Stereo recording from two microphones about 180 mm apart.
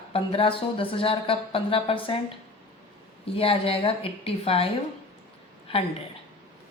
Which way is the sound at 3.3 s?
30° left (ahead or behind).